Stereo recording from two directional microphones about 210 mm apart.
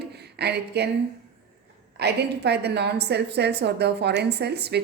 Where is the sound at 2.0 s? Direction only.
50° right (ahead or behind).